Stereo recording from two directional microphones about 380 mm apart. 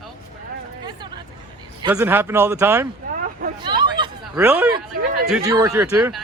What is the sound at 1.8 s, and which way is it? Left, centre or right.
Speech, centre.